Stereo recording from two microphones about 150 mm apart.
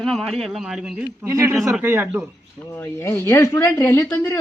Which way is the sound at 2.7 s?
15° left (ahead or behind).